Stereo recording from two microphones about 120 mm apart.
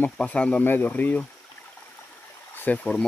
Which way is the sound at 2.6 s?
10° left (ahead or behind).